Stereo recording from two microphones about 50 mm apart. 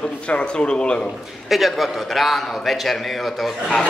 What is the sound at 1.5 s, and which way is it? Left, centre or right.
A man's voice, centre.